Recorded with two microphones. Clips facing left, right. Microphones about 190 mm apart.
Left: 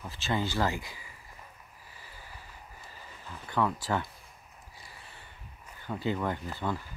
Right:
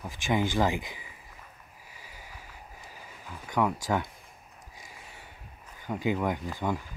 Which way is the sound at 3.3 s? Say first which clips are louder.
Right 2 dB; 10° right (ahead or behind).